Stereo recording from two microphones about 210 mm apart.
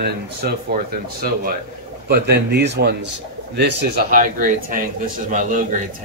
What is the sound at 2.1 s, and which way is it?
Speech, 50° right (ahead or behind).